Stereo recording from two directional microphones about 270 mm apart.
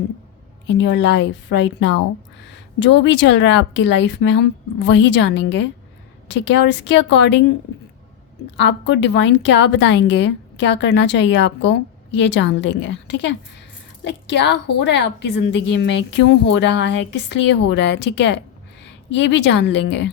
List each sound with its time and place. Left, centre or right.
0.7 s a woman's voice: left
8.5 s a woman's voice: left